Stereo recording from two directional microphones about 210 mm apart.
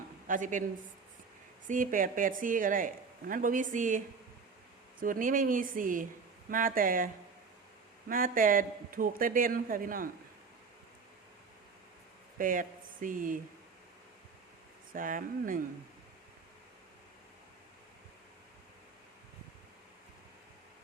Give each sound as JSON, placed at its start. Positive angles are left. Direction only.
{"t": 0.3, "sound": "speech", "side_deg": -40}
{"t": 1.6, "sound": "speech", "side_deg": -40}
{"t": 8.1, "sound": "speech", "side_deg": -40}
{"t": 12.4, "sound": "speech", "side_deg": -40}
{"t": 14.9, "sound": "speech", "side_deg": -40}